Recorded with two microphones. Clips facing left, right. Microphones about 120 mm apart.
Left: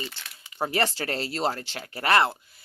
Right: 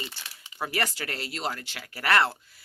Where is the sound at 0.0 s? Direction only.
15° right (ahead or behind).